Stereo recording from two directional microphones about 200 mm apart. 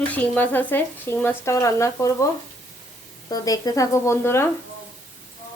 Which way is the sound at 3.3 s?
20° left (ahead or behind).